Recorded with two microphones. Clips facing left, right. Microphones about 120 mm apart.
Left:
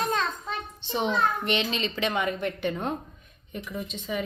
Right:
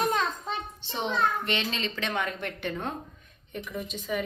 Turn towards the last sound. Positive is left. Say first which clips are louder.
# even
turn(degrees=5)  # may be behind; listen again after turning